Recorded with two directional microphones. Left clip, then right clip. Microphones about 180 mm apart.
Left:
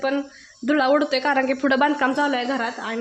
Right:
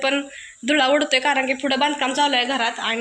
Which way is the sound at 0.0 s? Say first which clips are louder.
Right 2 dB; 20° left (ahead or behind).